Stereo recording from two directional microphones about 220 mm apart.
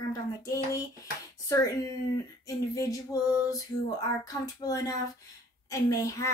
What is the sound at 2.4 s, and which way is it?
Speech, 15° left (ahead or behind).